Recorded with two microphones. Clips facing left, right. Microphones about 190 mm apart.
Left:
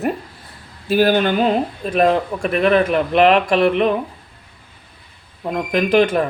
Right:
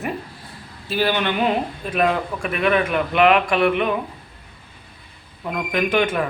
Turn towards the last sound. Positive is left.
turn(degrees=35)  # may be behind; listen again after turning